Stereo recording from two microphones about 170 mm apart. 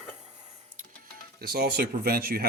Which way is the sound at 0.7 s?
60° right (ahead or behind).